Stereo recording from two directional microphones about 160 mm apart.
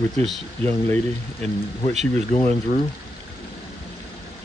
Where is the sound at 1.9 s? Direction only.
45° right (ahead or behind).